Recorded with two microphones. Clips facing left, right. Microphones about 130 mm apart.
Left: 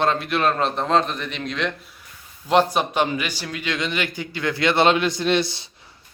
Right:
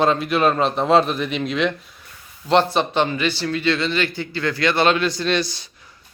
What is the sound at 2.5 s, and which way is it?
A man's voice, 10° left (ahead or behind).